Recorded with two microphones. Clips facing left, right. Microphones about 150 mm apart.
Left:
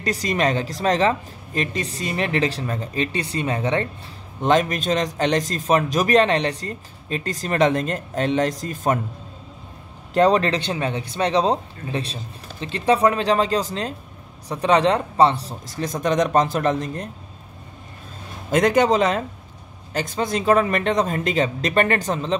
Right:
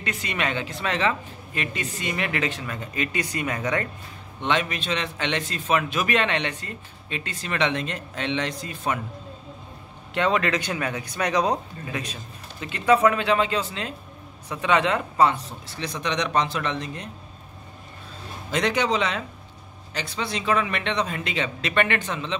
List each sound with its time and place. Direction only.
0.0 s a man's voice: 40° left (ahead or behind)
4.4 s a man's voice: 40° left (ahead or behind)
10.1 s a man's voice: 35° left (ahead or behind)
18.5 s a man's voice: 45° left (ahead or behind)